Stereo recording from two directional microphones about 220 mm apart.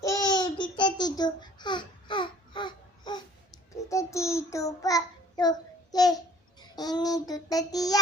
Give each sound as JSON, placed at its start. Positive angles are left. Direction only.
{"t": 0.0, "sound": "babbling", "side_deg": 15}